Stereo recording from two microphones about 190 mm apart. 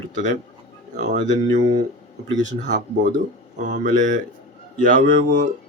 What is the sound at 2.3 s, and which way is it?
Speech, 40° right (ahead or behind).